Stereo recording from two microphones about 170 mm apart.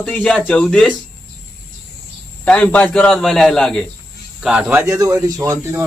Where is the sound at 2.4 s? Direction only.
10° left (ahead or behind).